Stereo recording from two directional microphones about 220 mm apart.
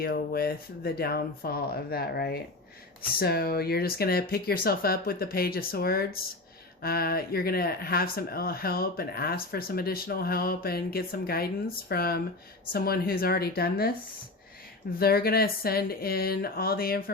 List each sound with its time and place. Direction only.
0.0 s speech: 45° left (ahead or behind)
14.9 s speech: 45° left (ahead or behind)